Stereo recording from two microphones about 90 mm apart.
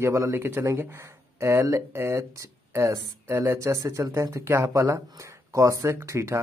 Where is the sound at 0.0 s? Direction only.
30° right (ahead or behind).